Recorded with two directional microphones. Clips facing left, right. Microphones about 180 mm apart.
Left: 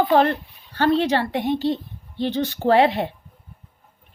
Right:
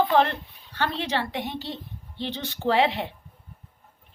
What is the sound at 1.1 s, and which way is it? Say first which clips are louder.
A woman's voice: left 7 dB; 50° left (ahead or behind).